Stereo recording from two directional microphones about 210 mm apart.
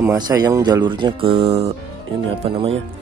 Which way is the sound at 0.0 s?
15° right (ahead or behind).